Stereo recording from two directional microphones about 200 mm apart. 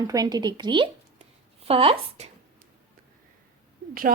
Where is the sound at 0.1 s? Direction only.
20° right (ahead or behind).